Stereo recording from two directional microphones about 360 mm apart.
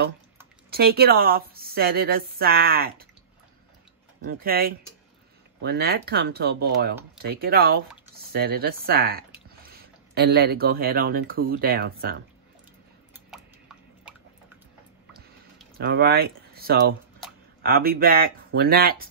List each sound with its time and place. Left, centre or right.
0.7 s a woman's voice: right
4.3 s a woman's voice: right
13.1 s a sound: centre
15.8 s a woman's voice: right